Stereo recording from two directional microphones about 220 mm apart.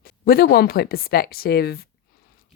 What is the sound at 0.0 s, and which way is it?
A woman's voice, 45° left (ahead or behind).